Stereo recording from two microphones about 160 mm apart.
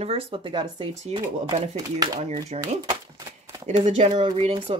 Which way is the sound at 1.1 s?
40° right (ahead or behind).